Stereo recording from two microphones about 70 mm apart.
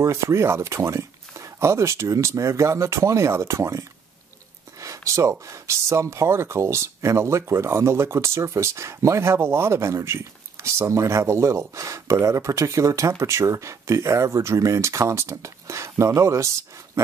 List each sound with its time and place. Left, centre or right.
0.0 s speech: right
4.7 s a sound: right
5.5 s speech: right